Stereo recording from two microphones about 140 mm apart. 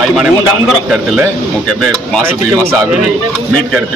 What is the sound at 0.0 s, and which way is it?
Speech, centre (ahead or behind).